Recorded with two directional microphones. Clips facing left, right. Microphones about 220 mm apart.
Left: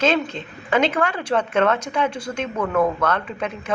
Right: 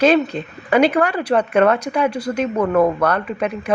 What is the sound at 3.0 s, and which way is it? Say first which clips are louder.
Speech: right 4 dB; 10° right (ahead or behind).